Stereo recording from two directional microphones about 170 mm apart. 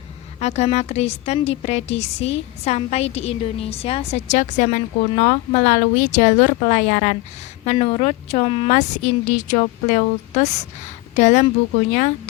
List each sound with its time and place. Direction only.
0.3 s a woman's voice: 40° left (ahead or behind)
7.6 s a woman's voice: 35° left (ahead or behind)
8.7 s speech: 45° left (ahead or behind)